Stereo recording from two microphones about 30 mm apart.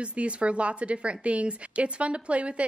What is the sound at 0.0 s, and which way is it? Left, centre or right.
A woman's voice, right.